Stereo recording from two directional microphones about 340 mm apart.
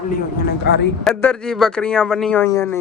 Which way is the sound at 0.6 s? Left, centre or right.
Left.